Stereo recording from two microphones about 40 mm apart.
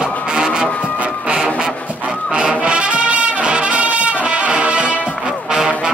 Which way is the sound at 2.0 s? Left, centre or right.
Right.